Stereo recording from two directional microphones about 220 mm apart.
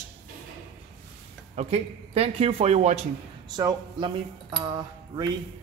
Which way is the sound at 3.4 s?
20° right (ahead or behind).